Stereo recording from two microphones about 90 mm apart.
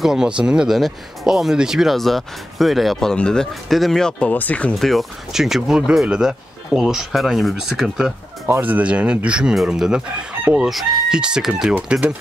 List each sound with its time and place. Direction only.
0.0 s speech: 5° right (ahead or behind)
4.3 s speech: 15° left (ahead or behind)
4.7 s speech: centre (ahead or behind)
8.5 s speech: 20° right (ahead or behind)
10.7 s speech: centre (ahead or behind)